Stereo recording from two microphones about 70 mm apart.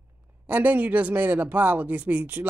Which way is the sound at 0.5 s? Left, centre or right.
Right.